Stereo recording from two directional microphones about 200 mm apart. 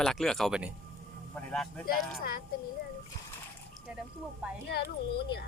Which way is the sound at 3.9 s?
5° right (ahead or behind).